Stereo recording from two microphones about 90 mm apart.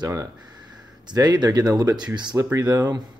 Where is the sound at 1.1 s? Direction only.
55° right (ahead or behind).